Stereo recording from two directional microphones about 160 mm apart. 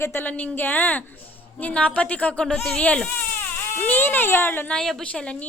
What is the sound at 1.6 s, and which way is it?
Speech, 10° left (ahead or behind).